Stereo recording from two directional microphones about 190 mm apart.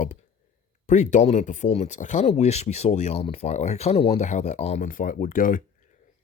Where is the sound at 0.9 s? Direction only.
40° left (ahead or behind).